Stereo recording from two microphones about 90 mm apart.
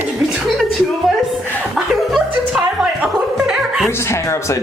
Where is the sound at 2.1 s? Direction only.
5° right (ahead or behind).